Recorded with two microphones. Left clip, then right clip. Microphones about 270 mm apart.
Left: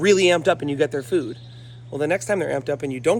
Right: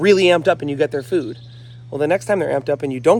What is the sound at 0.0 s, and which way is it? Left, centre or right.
Speech, centre.